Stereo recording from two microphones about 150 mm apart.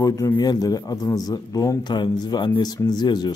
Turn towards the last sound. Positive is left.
turn(degrees=30)  # may be behind; listen again after turning